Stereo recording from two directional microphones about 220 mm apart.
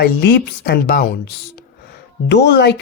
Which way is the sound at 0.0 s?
45° left (ahead or behind).